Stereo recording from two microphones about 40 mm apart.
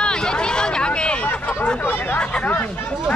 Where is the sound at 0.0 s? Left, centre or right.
Left.